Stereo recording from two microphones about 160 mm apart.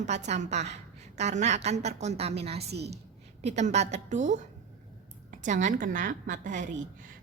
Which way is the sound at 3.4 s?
45° right (ahead or behind).